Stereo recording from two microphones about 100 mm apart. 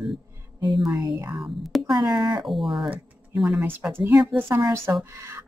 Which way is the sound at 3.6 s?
20° right (ahead or behind).